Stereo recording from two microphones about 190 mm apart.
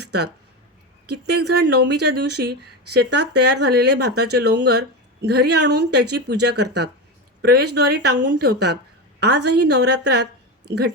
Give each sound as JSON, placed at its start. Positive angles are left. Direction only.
{"t": 1.0, "sound": "speech", "side_deg": -60}